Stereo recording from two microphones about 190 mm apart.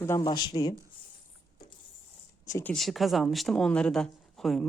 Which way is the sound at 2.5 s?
5° left (ahead or behind).